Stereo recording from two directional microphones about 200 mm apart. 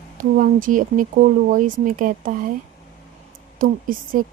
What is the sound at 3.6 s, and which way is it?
Speech, 45° right (ahead or behind).